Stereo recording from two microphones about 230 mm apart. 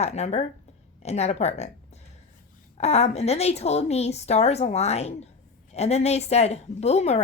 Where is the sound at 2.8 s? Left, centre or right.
Left.